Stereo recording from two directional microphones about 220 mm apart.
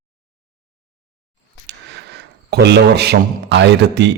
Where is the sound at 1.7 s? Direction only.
50° right (ahead or behind).